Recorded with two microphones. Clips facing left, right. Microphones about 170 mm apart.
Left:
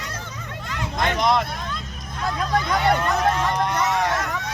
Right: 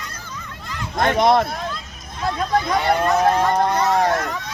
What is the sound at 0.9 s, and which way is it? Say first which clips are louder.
Speech: right 5 dB; 55° right (ahead or behind).